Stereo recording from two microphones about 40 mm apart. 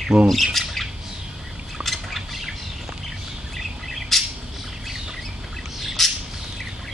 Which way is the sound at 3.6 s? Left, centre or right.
Centre.